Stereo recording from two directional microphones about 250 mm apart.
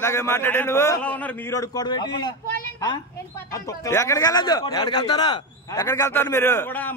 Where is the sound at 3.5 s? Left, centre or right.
Centre.